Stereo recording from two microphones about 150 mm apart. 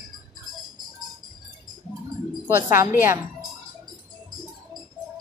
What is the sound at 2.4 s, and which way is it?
Speech, 15° right (ahead or behind).